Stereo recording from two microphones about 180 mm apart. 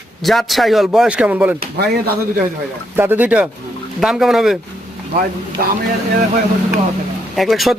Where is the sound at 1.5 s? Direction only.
60° right (ahead or behind).